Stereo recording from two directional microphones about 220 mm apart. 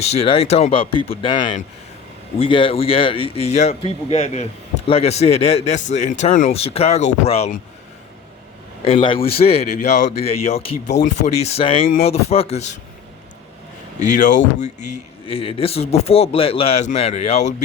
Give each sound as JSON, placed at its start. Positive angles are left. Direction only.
{"t": 0.0, "sound": "a man's voice", "side_deg": 30}
{"t": 8.8, "sound": "a man's voice", "side_deg": 25}
{"t": 14.0, "sound": "a man's voice", "side_deg": 35}